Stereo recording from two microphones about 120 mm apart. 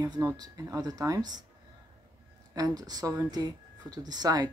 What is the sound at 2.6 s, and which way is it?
Speech, 30° right (ahead or behind).